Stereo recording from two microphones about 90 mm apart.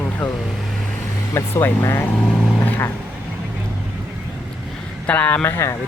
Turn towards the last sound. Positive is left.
turn(degrees=25)  # may be behind; listen again after turning